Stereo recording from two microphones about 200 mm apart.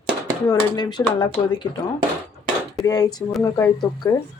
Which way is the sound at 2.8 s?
20° left (ahead or behind).